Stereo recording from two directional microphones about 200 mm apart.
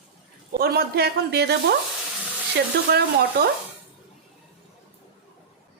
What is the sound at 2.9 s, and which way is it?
Speech, 55° right (ahead or behind).